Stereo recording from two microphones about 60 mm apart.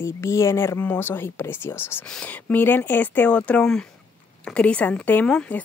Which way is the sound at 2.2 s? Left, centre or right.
Left.